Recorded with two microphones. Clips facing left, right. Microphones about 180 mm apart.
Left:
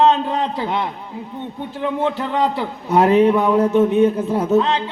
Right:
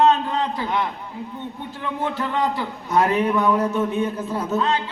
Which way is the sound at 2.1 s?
15° left (ahead or behind).